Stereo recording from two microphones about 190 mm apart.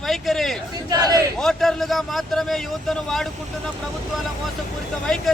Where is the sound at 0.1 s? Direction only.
Centre (ahead or behind).